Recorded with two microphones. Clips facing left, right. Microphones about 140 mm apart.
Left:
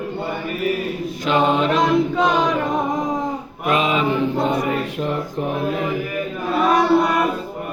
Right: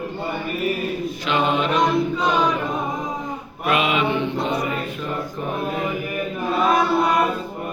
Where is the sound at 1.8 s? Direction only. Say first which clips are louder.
Left 3 dB; 90° left.